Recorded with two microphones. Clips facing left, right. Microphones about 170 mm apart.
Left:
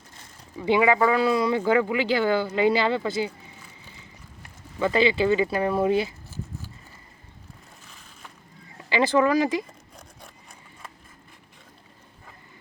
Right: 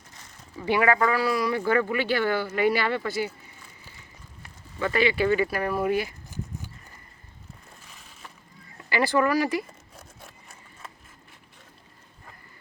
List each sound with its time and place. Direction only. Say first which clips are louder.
0.5 s speech: left 2 dB; 15° left (ahead or behind)
4.8 s speech: left 2 dB; 25° left (ahead or behind)
8.9 s speech: left 2 dB; 20° left (ahead or behind)